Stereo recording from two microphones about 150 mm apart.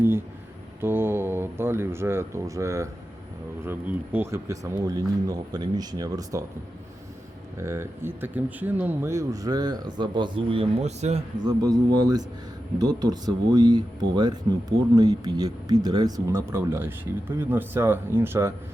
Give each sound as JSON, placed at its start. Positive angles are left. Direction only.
{"t": 0.8, "sound": "speech", "side_deg": -15}
{"t": 7.6, "sound": "speech", "side_deg": -15}
{"t": 11.4, "sound": "speech", "side_deg": -25}